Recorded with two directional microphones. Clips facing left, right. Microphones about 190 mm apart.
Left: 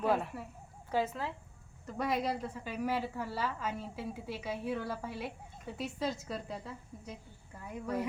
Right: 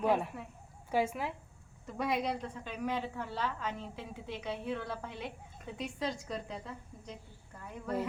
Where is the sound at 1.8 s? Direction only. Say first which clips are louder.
Even; centre (ahead or behind).